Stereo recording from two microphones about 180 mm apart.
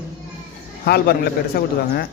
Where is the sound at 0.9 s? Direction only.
60° left (ahead or behind).